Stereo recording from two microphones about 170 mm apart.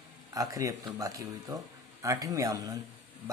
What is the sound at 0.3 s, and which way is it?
Speech, 20° right (ahead or behind).